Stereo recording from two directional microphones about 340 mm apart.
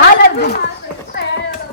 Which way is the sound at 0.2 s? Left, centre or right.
Left.